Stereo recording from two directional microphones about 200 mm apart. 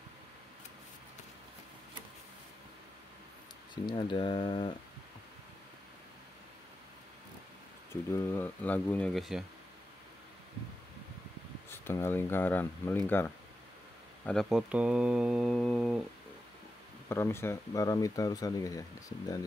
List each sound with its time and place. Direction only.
3.7 s speech: 25° left (ahead or behind)
7.9 s speech: 15° left (ahead or behind)
11.7 s speech: 10° left (ahead or behind)
17.1 s speech: 10° left (ahead or behind)